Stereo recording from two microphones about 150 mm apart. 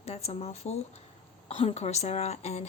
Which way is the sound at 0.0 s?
45° left (ahead or behind).